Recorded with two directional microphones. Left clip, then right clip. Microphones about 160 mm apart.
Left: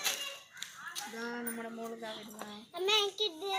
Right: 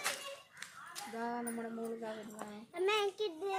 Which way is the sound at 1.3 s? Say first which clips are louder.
Even; 35° right (ahead or behind).